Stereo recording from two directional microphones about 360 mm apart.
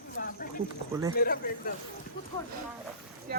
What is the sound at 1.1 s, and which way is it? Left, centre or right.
Speech, left.